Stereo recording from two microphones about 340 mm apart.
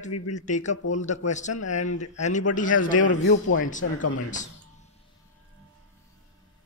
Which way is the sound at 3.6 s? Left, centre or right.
Left.